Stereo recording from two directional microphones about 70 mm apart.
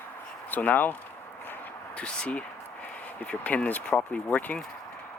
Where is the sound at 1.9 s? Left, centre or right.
Centre.